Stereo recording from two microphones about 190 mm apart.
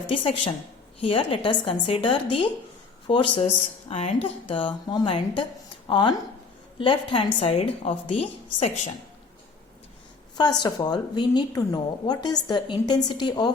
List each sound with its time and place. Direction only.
0.1 s a woman's voice: 30° left (ahead or behind)
10.3 s a woman's voice: 20° left (ahead or behind)